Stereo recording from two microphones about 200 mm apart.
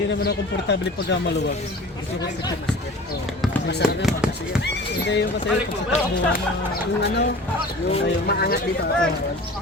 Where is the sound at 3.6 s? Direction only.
55° left (ahead or behind).